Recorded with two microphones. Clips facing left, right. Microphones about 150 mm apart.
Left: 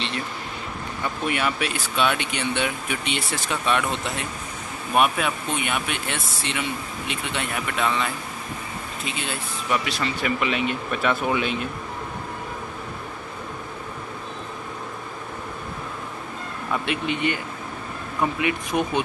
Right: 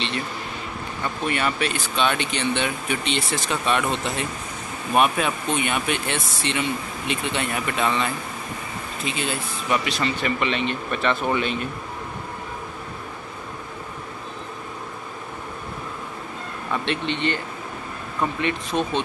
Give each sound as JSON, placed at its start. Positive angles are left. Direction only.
{"t": 1.2, "sound": "speech", "side_deg": 5}
{"t": 9.7, "sound": "speech", "side_deg": 5}
{"t": 16.7, "sound": "speech", "side_deg": 10}